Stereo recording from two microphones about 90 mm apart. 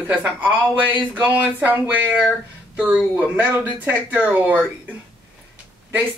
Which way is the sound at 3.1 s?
20° right (ahead or behind).